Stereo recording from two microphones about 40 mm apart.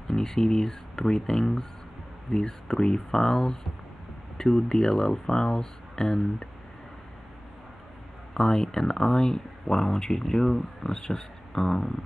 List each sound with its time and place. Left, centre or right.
0.1 s speech: centre
8.4 s speech: centre